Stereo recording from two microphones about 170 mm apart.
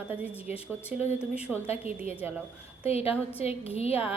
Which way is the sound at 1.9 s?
40° left (ahead or behind).